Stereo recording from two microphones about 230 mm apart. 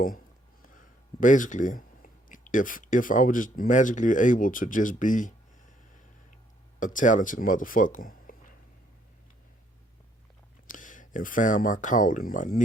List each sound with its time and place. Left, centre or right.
0.8 s speech: left
6.7 s speech: left
10.7 s speech: left